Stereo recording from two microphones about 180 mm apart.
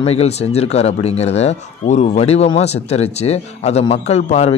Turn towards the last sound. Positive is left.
turn(degrees=35)  # may be behind; listen again after turning